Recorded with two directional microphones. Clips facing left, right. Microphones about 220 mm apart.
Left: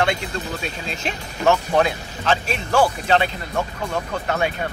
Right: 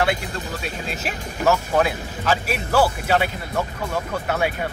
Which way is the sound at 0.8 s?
5° right (ahead or behind).